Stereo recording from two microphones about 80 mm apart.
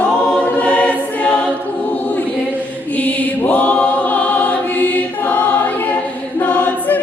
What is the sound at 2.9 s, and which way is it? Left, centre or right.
Choir, centre.